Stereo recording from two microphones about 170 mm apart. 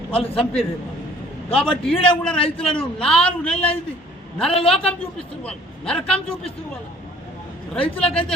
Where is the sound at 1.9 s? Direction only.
30° left (ahead or behind).